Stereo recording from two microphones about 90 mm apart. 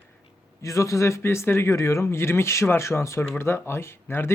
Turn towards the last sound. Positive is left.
turn(degrees=25)  # may be behind; listen again after turning